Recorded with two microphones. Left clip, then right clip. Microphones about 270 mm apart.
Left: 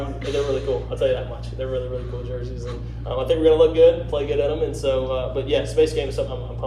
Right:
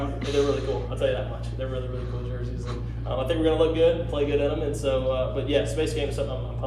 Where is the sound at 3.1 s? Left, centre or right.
Left.